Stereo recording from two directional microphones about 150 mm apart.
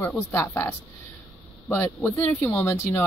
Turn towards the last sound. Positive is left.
turn(degrees=15)  # may be behind; listen again after turning